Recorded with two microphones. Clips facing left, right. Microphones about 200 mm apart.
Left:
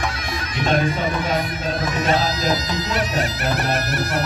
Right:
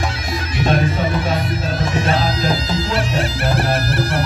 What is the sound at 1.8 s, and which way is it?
Music, 30° right (ahead or behind).